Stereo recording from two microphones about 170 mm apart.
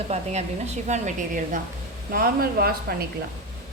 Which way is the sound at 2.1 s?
60° right (ahead or behind).